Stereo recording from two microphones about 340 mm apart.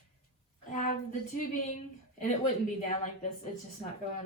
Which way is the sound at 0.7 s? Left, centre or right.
Left.